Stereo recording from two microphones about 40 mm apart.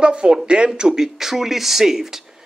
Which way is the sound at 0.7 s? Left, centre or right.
Centre.